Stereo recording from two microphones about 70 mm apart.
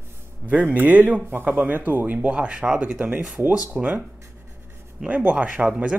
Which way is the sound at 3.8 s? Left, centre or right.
Centre.